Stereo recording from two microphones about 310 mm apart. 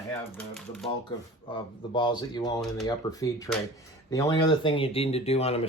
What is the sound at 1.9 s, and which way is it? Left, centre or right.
Speech, centre.